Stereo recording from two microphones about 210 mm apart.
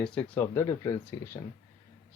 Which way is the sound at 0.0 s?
5° left (ahead or behind).